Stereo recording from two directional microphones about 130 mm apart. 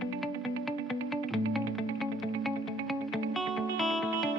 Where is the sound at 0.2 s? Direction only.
Centre (ahead or behind).